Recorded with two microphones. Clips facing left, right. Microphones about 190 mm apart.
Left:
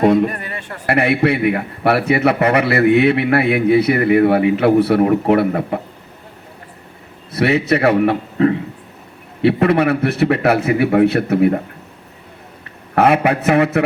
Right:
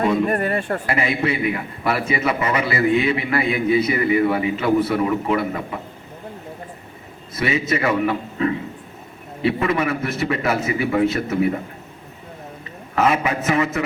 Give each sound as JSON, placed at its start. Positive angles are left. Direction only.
{"t": 0.0, "sound": "a man's voice", "side_deg": 60}
{"t": 0.3, "sound": "speech", "side_deg": -45}
{"t": 0.9, "sound": "a man's voice", "side_deg": 65}
{"t": 7.3, "sound": "a man's voice", "side_deg": 65}
{"t": 13.0, "sound": "a man's voice", "side_deg": 60}